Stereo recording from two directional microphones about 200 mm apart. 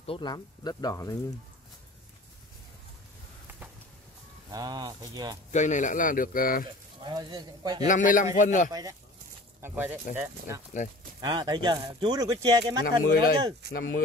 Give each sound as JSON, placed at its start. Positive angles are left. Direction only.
{"t": 0.0, "sound": "speech", "side_deg": 25}
{"t": 4.5, "sound": "speech", "side_deg": -20}
{"t": 5.5, "sound": "speech", "side_deg": 40}
{"t": 7.0, "sound": "speech", "side_deg": -20}
{"t": 7.8, "sound": "a man's voice", "side_deg": 40}
{"t": 9.6, "sound": "speech", "side_deg": -10}
{"t": 10.8, "sound": "a man's voice", "side_deg": 35}
{"t": 11.1, "sound": "speech", "side_deg": -20}
{"t": 13.0, "sound": "speech", "side_deg": 45}